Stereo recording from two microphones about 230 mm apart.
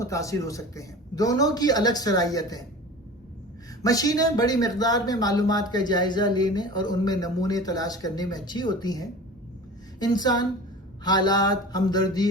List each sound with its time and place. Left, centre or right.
0.0 s speech: centre
3.8 s speech: centre